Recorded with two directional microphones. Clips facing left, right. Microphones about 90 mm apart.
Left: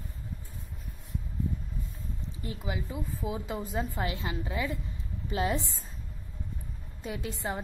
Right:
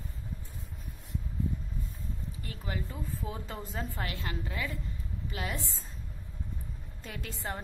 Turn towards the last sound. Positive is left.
turn(degrees=15)  # may be behind; listen again after turning